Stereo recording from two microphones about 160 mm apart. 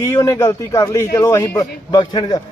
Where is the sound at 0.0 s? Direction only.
20° left (ahead or behind).